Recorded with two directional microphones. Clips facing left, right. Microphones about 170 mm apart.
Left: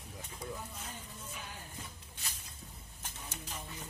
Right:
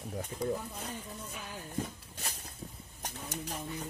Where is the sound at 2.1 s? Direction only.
55° right (ahead or behind).